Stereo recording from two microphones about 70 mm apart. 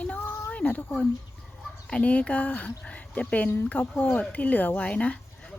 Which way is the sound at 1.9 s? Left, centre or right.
Centre.